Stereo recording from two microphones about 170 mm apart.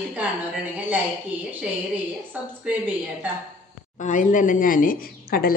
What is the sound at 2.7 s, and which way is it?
Speech, 5° right (ahead or behind).